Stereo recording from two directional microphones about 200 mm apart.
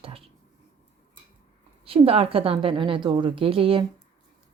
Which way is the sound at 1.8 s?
30° right (ahead or behind).